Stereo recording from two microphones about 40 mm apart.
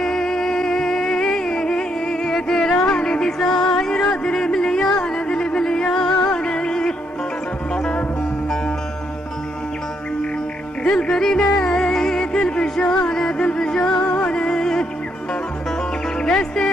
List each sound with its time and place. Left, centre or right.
0.0 s music: centre
10.8 s music: left
16.2 s music: centre